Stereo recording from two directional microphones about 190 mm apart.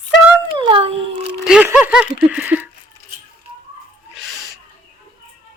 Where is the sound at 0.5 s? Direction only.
25° right (ahead or behind).